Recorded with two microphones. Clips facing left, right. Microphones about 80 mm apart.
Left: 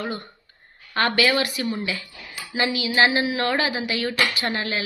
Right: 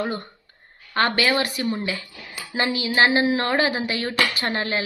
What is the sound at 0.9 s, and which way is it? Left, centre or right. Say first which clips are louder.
Speech: even; right.